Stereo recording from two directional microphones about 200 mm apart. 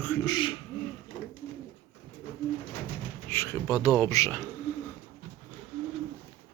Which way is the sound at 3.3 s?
15° left (ahead or behind).